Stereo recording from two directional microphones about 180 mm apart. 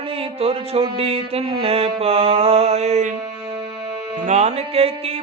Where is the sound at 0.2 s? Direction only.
35° right (ahead or behind).